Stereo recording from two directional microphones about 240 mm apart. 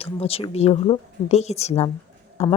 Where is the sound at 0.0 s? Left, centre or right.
Left.